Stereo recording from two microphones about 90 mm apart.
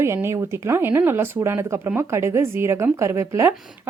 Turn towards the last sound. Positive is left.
turn(degrees=-30)  # may be behind; listen again after turning